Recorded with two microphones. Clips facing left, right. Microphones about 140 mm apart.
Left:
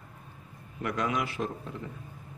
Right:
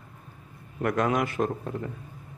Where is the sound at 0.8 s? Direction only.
50° right (ahead or behind).